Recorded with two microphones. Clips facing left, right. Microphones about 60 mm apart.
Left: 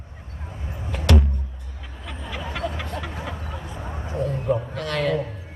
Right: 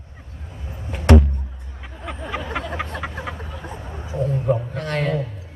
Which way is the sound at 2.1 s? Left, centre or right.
Right.